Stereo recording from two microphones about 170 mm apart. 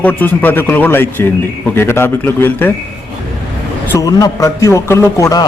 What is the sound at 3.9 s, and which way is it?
A man's voice, 20° left (ahead or behind).